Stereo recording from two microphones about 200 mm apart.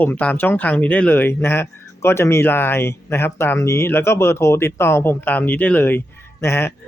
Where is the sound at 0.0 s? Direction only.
10° left (ahead or behind).